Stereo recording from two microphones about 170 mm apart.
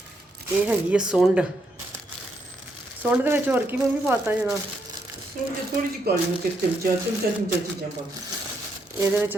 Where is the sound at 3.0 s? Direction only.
10° right (ahead or behind).